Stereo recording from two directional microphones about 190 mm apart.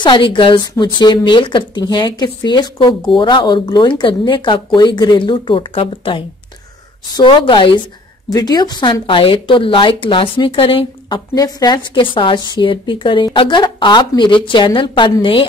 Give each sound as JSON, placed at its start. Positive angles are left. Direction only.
{"t": 0.0, "sound": "speech", "side_deg": 25}